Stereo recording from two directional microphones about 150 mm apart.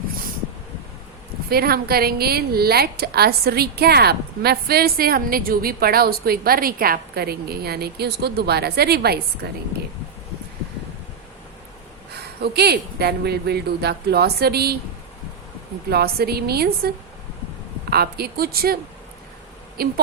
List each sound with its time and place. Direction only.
1.5 s a woman's voice: 90° right
12.1 s a woman's voice: 90° right
15.9 s a woman's voice: 90° right
17.9 s a woman's voice: 90° right
19.8 s a woman's voice: 90° right